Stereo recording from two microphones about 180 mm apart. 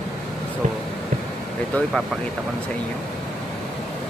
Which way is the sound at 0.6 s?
45° right (ahead or behind).